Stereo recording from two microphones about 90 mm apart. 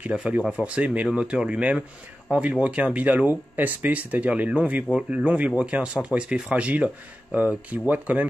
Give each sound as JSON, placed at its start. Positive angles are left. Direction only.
{"t": 0.0, "sound": "speech", "side_deg": -15}